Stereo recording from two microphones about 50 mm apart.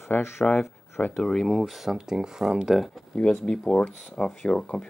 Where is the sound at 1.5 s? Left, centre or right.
Centre.